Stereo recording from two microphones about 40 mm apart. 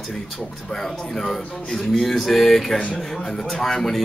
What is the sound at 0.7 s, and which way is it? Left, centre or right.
A man's voice, centre.